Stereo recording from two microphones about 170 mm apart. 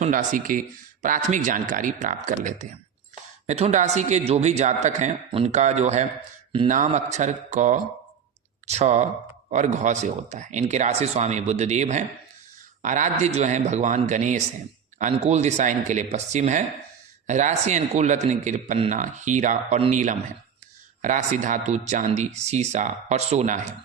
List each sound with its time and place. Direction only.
0.0 s a man's voice: 50° right (ahead or behind)
21.0 s speech: 50° right (ahead or behind)